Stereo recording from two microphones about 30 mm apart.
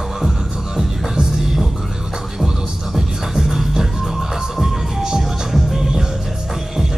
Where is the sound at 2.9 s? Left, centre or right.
Centre.